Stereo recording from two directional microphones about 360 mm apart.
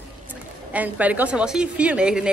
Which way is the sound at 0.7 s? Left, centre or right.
Centre.